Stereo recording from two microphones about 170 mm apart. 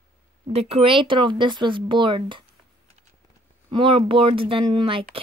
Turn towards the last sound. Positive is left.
turn(degrees=-30)  # may be behind; listen again after turning